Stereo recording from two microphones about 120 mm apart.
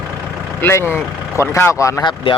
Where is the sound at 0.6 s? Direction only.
20° left (ahead or behind).